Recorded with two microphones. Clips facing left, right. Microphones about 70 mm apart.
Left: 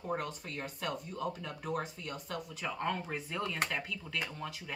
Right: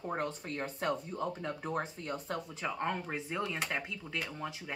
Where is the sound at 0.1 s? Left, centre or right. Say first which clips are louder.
Even; right.